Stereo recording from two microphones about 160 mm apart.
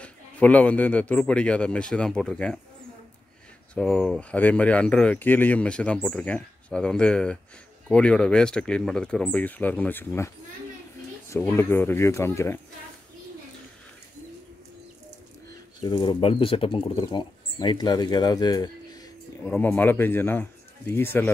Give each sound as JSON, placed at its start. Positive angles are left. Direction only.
{"t": 0.0, "sound": "speech", "side_deg": 10}
{"t": 3.7, "sound": "speech", "side_deg": 5}
{"t": 15.8, "sound": "speech", "side_deg": 30}
{"t": 19.4, "sound": "speech", "side_deg": 10}